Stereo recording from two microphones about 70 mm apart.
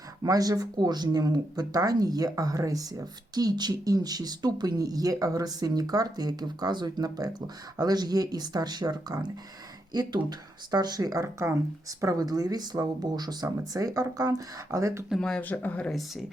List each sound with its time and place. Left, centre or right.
0.2 s speech: right
11.2 s speech: right
15.4 s speech: left
15.9 s speech: centre